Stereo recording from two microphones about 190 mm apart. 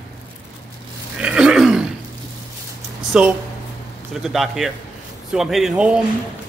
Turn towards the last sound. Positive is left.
turn(degrees=-5)  # may be behind; listen again after turning